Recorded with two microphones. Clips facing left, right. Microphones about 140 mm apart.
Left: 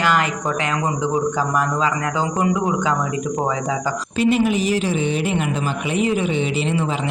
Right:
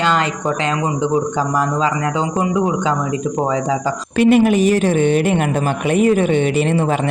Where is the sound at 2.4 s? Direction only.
25° right (ahead or behind).